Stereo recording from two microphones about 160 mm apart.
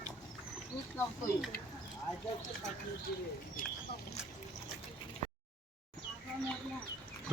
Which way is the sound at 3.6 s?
60° left (ahead or behind).